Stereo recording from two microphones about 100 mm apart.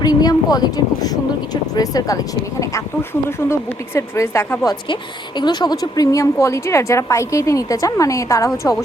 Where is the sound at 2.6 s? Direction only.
25° left (ahead or behind).